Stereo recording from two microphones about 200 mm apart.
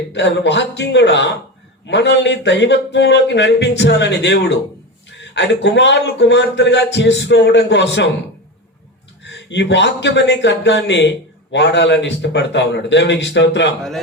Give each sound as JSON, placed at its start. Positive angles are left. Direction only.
{"t": 0.1, "sound": "speech", "side_deg": 60}
{"t": 9.2, "sound": "speech", "side_deg": 60}